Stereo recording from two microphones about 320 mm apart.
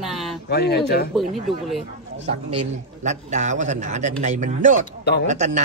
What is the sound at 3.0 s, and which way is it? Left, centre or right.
A man's voice, right.